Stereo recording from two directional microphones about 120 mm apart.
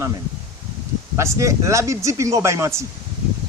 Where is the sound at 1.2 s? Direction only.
25° right (ahead or behind).